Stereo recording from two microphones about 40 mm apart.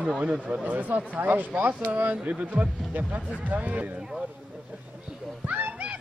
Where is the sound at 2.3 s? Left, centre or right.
Right.